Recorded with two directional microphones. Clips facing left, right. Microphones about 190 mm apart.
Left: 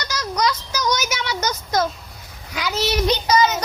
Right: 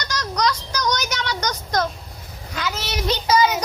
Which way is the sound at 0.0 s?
5° left (ahead or behind).